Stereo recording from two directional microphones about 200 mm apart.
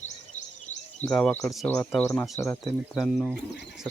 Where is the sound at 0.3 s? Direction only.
35° left (ahead or behind).